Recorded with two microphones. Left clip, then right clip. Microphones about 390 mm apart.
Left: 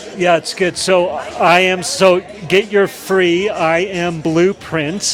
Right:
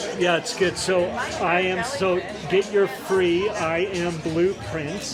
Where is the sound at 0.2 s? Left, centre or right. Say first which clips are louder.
Left 8 dB; left.